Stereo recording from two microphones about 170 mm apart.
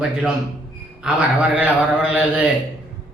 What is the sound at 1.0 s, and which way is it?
A man's voice, 5° right (ahead or behind).